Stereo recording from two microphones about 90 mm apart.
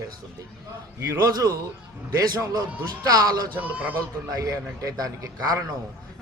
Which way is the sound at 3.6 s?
20° right (ahead or behind).